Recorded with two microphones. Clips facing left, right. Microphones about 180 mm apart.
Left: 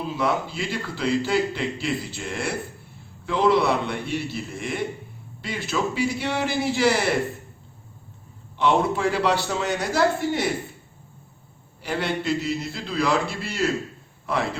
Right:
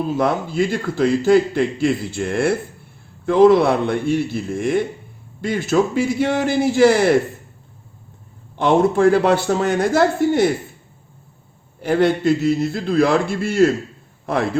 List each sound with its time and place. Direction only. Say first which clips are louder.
0.0 s a man's voice: right 5 dB; 45° right (ahead or behind)
8.5 s a man's voice: right 6 dB; 50° right (ahead or behind)
11.8 s a man's voice: right 10 dB; 50° right (ahead or behind)